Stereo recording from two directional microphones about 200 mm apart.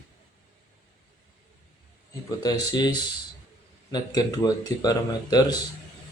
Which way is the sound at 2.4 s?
20° left (ahead or behind).